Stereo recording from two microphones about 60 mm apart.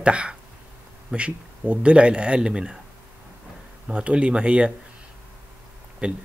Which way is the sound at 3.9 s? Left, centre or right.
Centre.